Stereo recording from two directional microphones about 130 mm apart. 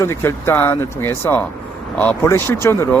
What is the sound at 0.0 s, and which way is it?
Speech, 20° left (ahead or behind).